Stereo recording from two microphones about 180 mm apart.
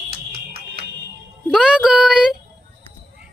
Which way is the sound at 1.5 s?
5° right (ahead or behind).